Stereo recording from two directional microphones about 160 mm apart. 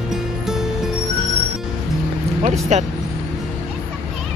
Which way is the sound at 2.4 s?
45° right (ahead or behind).